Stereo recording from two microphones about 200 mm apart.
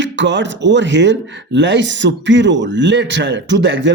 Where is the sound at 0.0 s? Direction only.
65° right (ahead or behind).